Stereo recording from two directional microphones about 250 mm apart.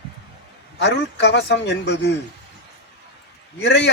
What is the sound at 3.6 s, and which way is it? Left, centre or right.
Speech, left.